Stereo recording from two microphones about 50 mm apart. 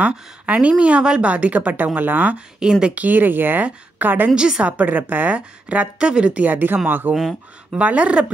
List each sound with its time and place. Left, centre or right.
0.0 s a woman's voice: right
1.3 s speech: right
2.3 s speech: centre
2.9 s speech: right
4.4 s speech: centre
4.6 s speech: right
5.3 s a woman's voice: right
6.4 s speech: right
7.7 s a woman's voice: right